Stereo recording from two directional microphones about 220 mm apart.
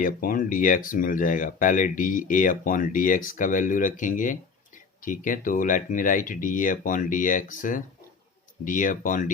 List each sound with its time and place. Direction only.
0.0 s speech: 40° left (ahead or behind)